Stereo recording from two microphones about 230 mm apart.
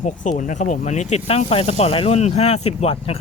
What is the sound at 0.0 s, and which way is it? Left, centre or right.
Speech, left.